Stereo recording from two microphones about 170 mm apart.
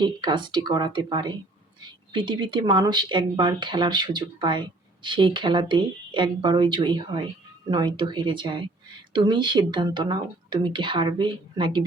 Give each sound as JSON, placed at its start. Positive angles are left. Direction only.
{"t": 0.0, "sound": "speech", "side_deg": -25}